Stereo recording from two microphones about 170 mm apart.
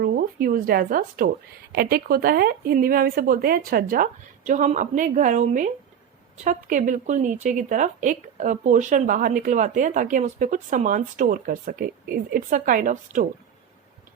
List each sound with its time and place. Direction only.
0.0 s speech: 60° right (ahead or behind)